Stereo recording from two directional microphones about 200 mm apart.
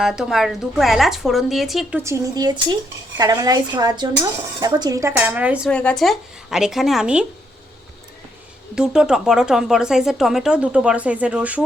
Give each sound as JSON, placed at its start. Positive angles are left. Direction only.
{"t": 0.0, "sound": "speech", "side_deg": -5}
{"t": 2.0, "sound": "a woman's voice", "side_deg": -15}
{"t": 5.7, "sound": "speech", "side_deg": 5}
{"t": 8.7, "sound": "speech", "side_deg": -5}